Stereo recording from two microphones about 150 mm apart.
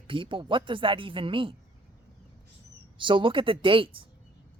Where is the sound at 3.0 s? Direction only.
35° right (ahead or behind).